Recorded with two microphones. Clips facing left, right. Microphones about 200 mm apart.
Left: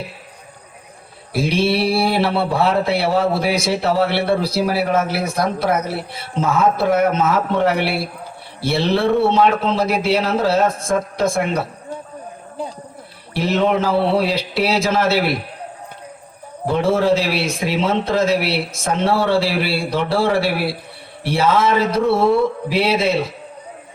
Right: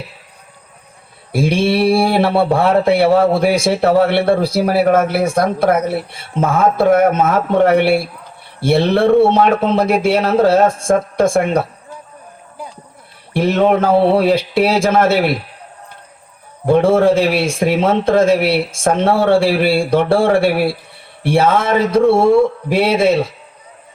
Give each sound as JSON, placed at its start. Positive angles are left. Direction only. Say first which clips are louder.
{"t": 1.3, "sound": "speech", "louder": "right 3 dB", "side_deg": -55}
{"t": 13.3, "sound": "speech", "louder": "right 4 dB", "side_deg": -55}
{"t": 16.6, "sound": "speech", "louder": "right 5 dB", "side_deg": -55}